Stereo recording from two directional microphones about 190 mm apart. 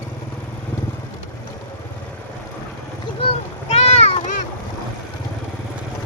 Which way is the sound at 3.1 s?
35° left (ahead or behind).